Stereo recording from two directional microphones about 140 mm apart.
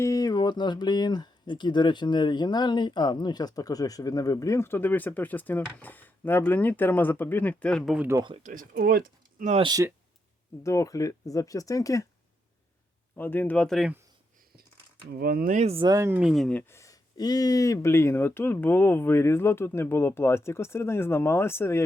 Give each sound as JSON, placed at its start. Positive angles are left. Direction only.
{"t": 0.0, "sound": "speech", "side_deg": 25}
{"t": 7.9, "sound": "speech", "side_deg": -15}
{"t": 8.4, "sound": "speech", "side_deg": -70}
{"t": 10.6, "sound": "speech", "side_deg": 20}
{"t": 13.1, "sound": "speech", "side_deg": 15}
{"t": 15.2, "sound": "speech", "side_deg": -90}
{"t": 15.6, "sound": "speech", "side_deg": -40}
{"t": 15.9, "sound": "speech", "side_deg": -20}
{"t": 16.1, "sound": "speech", "side_deg": -5}
{"t": 16.6, "sound": "speech", "side_deg": 20}